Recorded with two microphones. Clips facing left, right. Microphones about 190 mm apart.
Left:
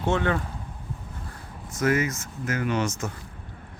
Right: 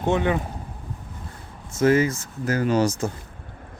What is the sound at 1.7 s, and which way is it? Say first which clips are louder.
Speech: right 5 dB; 30° right (ahead or behind).